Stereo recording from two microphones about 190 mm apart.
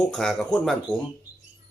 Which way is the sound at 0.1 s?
5° left (ahead or behind).